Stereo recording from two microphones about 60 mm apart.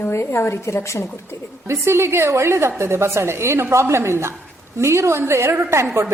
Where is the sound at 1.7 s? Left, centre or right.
Right.